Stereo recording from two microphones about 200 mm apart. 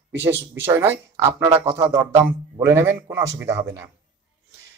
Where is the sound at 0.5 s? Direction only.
10° right (ahead or behind).